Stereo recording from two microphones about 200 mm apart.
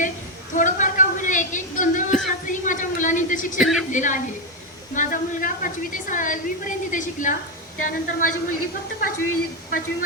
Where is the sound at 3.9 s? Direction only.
40° left (ahead or behind).